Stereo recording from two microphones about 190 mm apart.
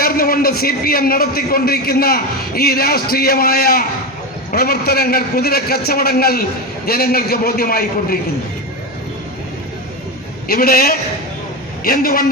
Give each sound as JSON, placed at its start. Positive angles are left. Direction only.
{"t": 0.0, "sound": "a man's voice", "side_deg": 50}
{"t": 10.5, "sound": "a man's voice", "side_deg": 55}